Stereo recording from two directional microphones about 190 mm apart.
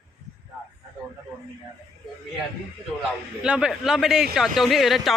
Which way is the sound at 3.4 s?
5° right (ahead or behind).